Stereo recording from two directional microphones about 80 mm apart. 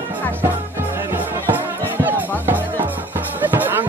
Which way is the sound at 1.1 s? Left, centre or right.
Right.